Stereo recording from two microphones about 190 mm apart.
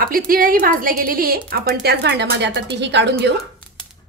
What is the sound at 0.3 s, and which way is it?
A woman's voice, 50° right (ahead or behind).